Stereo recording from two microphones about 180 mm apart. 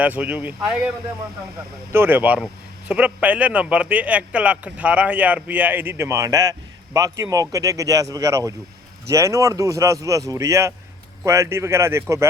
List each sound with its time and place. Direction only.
0.0 s speech: 10° right (ahead or behind)
1.9 s speech: 10° right (ahead or behind)